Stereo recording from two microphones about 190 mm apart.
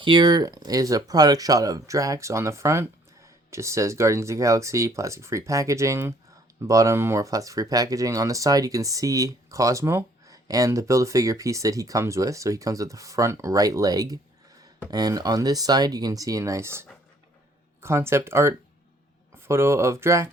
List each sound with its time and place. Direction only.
0.0 s speech: 25° right (ahead or behind)